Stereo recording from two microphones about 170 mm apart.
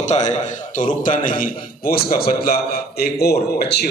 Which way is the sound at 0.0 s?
45° left (ahead or behind).